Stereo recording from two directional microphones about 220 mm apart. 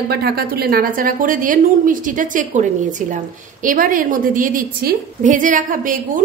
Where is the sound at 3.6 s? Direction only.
40° right (ahead or behind).